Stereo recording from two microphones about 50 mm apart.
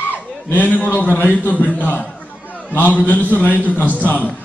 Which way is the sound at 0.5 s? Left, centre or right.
Left.